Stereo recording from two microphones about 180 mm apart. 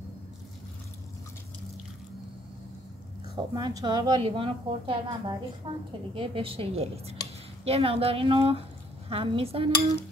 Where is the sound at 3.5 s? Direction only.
25° right (ahead or behind).